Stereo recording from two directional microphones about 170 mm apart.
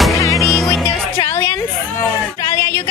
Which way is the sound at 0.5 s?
Centre (ahead or behind).